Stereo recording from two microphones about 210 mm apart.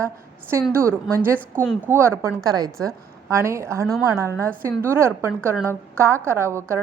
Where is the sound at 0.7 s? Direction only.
15° right (ahead or behind).